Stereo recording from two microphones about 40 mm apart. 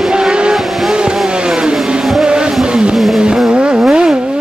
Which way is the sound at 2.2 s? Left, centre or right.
Right.